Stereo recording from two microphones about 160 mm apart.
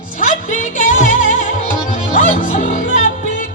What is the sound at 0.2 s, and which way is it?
Music, 55° left (ahead or behind).